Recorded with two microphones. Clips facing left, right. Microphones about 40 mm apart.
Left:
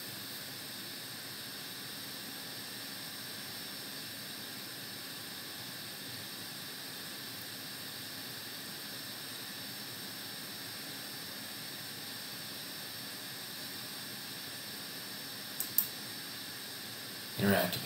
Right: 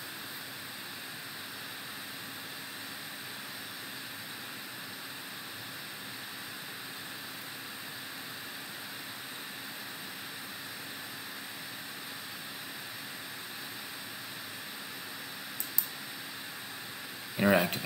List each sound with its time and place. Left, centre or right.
17.4 s speech: right